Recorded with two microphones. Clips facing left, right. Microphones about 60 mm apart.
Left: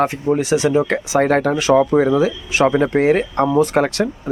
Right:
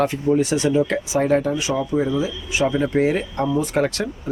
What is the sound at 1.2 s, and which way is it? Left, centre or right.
Speech, left.